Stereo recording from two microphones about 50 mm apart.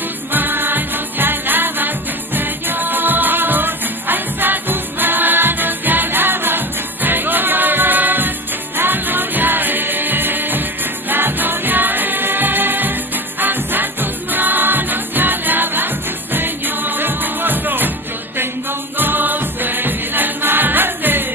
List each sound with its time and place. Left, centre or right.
0.3 s music: right